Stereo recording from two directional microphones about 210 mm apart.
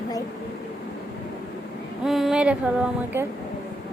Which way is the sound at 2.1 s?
Centre (ahead or behind).